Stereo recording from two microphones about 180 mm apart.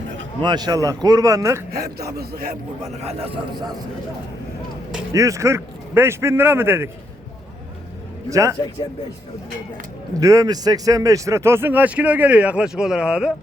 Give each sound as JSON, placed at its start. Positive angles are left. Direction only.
{"t": 0.4, "sound": "speech", "side_deg": -25}
{"t": 1.7, "sound": "a man's voice", "side_deg": -60}
{"t": 3.0, "sound": "a man's voice", "side_deg": -35}
{"t": 5.1, "sound": "a man's voice", "side_deg": -15}
{"t": 8.3, "sound": "a man's voice", "side_deg": -15}
{"t": 10.2, "sound": "a man's voice", "side_deg": -20}